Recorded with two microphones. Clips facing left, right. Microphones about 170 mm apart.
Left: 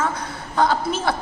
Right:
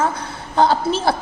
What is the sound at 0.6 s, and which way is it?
Speech, 30° right (ahead or behind).